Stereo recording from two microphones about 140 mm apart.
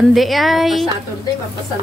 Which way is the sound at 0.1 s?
Centre (ahead or behind).